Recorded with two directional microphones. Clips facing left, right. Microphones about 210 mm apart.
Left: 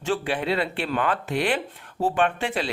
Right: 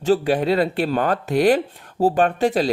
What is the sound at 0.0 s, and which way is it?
Speech, 40° right (ahead or behind).